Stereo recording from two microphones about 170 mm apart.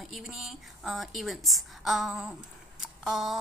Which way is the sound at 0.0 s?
Centre (ahead or behind).